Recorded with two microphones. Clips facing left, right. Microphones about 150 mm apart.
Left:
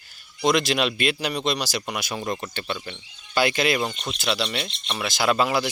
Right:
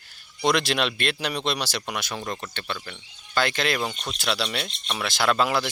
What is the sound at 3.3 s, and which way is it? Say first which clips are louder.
Speech: left 3 dB; 10° left (ahead or behind).